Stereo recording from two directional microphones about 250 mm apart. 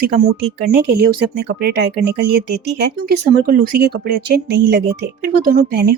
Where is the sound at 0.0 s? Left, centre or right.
Right.